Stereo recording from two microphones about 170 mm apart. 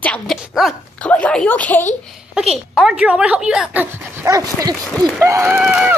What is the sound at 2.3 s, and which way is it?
Speech, centre (ahead or behind).